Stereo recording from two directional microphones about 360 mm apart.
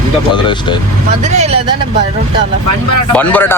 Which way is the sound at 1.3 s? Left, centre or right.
Centre.